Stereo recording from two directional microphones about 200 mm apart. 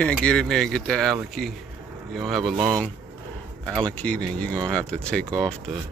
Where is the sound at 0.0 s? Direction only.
5° left (ahead or behind).